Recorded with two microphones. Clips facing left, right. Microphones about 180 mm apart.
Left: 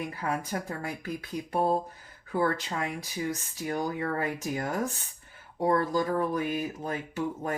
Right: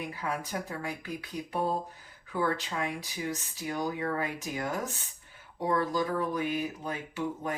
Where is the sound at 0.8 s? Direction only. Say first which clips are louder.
Left 2 dB; 45° left (ahead or behind).